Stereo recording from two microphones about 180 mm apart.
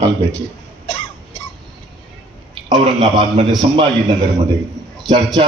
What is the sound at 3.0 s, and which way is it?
Speech, 25° right (ahead or behind).